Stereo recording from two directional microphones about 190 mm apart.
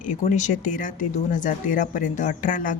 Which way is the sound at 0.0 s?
40° left (ahead or behind).